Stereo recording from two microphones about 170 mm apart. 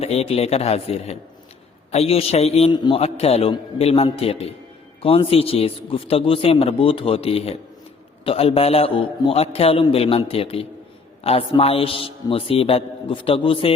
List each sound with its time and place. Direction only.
0.0 s a man's voice: 35° left (ahead or behind)